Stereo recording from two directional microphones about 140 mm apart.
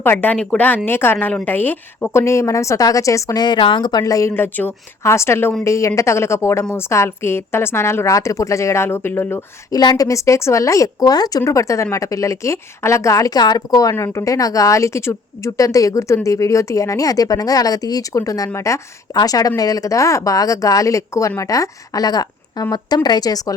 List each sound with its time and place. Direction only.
0.0 s a woman's voice: 15° left (ahead or behind)
9.7 s speech: 30° left (ahead or behind)